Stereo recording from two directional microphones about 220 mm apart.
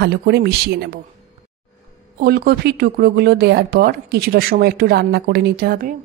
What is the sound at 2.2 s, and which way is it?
Speech, 45° right (ahead or behind).